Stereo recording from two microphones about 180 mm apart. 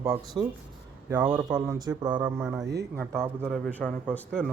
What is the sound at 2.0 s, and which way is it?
Speech, 25° right (ahead or behind).